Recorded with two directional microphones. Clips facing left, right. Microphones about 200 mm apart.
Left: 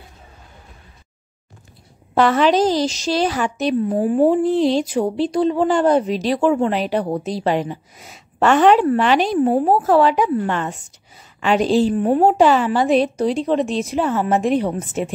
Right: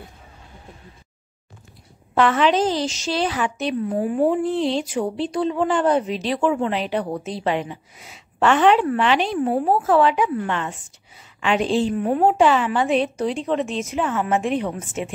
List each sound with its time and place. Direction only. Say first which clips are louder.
2.1 s a woman's voice: left 3 dB; 35° left (ahead or behind)